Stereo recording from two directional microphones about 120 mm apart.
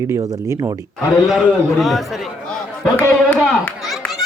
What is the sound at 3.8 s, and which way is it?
Children playing, centre (ahead or behind).